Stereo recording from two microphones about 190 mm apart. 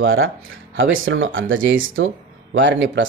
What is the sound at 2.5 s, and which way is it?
Speech, 75° right (ahead or behind).